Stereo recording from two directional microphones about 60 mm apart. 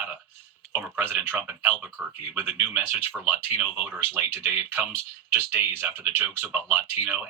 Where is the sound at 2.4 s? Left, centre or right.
Right.